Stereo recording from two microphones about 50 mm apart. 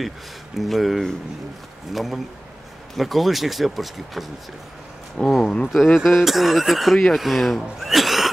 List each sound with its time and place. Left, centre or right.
0.6 s speech: centre
5.2 s speech: centre
5.7 s speech: centre